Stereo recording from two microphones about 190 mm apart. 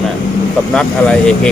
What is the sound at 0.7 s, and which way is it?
Speech, 5° left (ahead or behind).